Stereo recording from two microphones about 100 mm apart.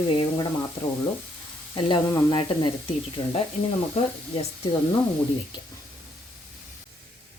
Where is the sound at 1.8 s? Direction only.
55° left (ahead or behind).